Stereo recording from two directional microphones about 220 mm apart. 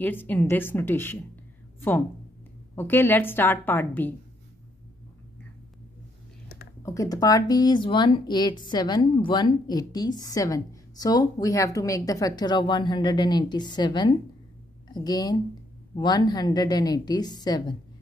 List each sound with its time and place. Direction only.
0.0 s a woman's voice: 10° left (ahead or behind)
6.8 s a woman's voice: 15° left (ahead or behind)